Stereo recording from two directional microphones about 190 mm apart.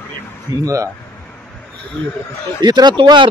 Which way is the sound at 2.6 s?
20° right (ahead or behind).